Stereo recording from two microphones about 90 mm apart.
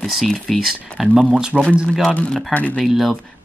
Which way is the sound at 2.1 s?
10° left (ahead or behind).